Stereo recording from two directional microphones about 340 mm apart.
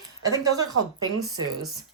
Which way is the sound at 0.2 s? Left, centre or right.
Centre.